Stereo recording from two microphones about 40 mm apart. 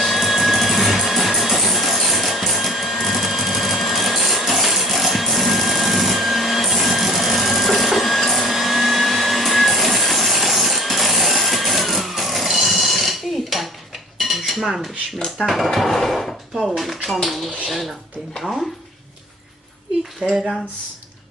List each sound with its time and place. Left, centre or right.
0.0 s music: centre
14.2 s cutlery: centre
15.4 s speech: centre
20.2 s speech: centre